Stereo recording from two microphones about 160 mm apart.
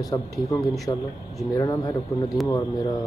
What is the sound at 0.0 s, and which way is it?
Speech, 20° left (ahead or behind).